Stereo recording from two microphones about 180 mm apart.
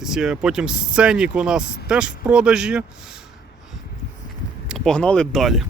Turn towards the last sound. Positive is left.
turn(degrees=0)  # may be behind; listen again after turning